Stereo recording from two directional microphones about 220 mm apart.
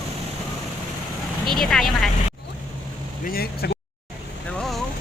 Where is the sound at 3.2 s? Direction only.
45° left (ahead or behind).